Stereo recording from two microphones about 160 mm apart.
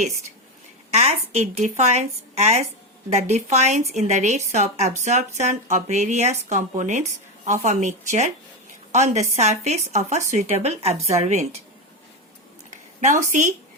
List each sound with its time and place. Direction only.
0.9 s a woman's voice: 45° right (ahead or behind)
13.3 s a woman's voice: 50° right (ahead or behind)